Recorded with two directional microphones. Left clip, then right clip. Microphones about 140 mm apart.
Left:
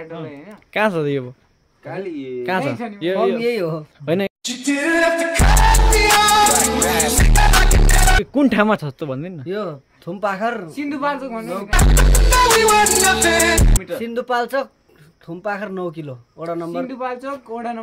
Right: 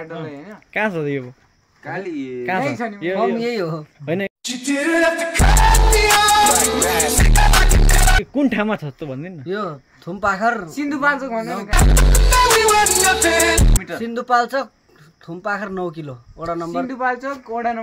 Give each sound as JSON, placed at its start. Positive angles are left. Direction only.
{"t": 0.3, "sound": "speech", "side_deg": -55}
{"t": 0.7, "sound": "speech", "side_deg": 35}
{"t": 2.4, "sound": "speech", "side_deg": 35}
{"t": 4.0, "sound": "speech", "side_deg": 45}
{"t": 4.4, "sound": "music", "side_deg": 0}
{"t": 8.4, "sound": "speech", "side_deg": 50}
{"t": 9.5, "sound": "speech", "side_deg": 25}
{"t": 10.7, "sound": "speech", "side_deg": -50}
{"t": 11.7, "sound": "music", "side_deg": 0}
{"t": 14.0, "sound": "speech", "side_deg": 20}
{"t": 16.8, "sound": "speech", "side_deg": -40}